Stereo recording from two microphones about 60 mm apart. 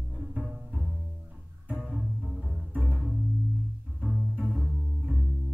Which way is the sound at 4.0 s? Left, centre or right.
Centre.